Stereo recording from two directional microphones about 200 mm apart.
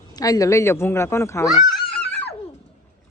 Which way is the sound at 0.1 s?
20° left (ahead or behind).